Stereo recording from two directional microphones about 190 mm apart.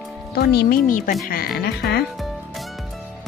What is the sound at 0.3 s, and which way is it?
Speech, 60° left (ahead or behind).